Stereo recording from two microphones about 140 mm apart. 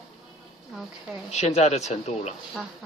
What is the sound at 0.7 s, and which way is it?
Speech, centre (ahead or behind).